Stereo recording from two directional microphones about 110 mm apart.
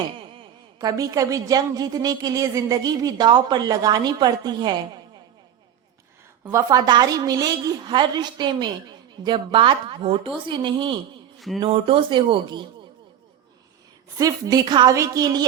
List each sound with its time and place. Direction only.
0.8 s a woman's voice: 30° right (ahead or behind)
6.6 s a woman's voice: 35° right (ahead or behind)
11.3 s mantra: centre (ahead or behind)
11.6 s a woman's voice: 55° right (ahead or behind)
14.2 s a woman's voice: 30° right (ahead or behind)